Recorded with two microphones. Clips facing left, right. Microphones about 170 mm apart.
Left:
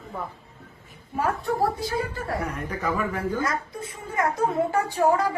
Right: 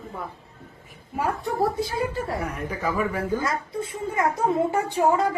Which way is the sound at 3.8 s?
25° right (ahead or behind).